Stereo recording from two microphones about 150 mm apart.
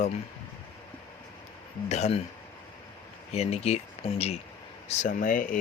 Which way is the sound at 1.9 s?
45° left (ahead or behind).